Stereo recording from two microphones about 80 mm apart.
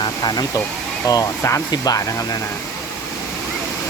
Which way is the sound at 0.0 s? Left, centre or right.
Left.